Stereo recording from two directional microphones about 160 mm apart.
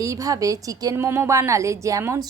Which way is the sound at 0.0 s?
20° right (ahead or behind).